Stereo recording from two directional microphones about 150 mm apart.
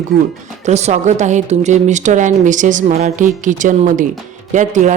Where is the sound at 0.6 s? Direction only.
50° right (ahead or behind).